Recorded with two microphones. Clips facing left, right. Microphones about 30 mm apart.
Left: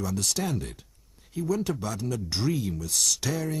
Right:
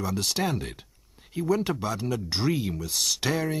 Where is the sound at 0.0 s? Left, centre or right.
Right.